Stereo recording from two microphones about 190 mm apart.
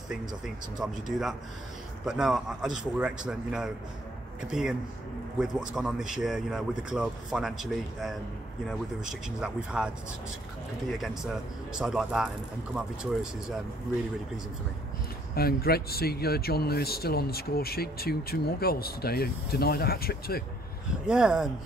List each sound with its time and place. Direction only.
0.7 s speech: centre (ahead or behind)
9.4 s speech: 5° right (ahead or behind)
11.7 s speech: centre (ahead or behind)
15.3 s speech: 55° left (ahead or behind)
21.1 s speech: 5° right (ahead or behind)